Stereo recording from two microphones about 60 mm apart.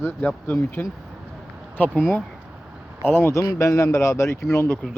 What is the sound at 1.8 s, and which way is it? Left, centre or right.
Speech, left.